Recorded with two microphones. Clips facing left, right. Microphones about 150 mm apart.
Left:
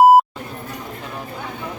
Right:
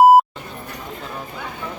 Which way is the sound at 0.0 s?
Centre (ahead or behind).